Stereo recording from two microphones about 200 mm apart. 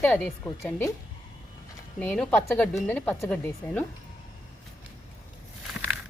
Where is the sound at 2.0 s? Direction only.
5° left (ahead or behind).